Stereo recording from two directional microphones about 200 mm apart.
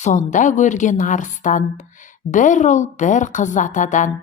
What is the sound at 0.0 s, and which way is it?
A woman's voice, 40° left (ahead or behind).